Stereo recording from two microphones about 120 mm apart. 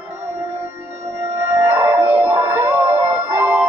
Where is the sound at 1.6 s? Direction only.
20° right (ahead or behind).